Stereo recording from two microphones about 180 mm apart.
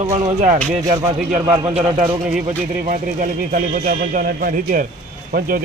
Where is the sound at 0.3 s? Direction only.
40° right (ahead or behind).